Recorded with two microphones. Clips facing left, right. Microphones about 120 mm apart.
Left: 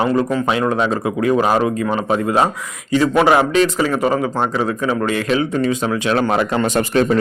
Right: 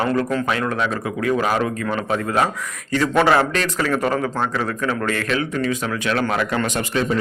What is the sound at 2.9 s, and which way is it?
A man's voice, 10° left (ahead or behind).